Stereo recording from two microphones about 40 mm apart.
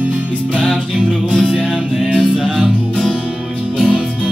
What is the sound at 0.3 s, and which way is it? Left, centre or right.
Music, left.